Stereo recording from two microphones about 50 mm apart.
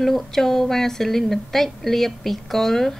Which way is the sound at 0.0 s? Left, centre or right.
Centre.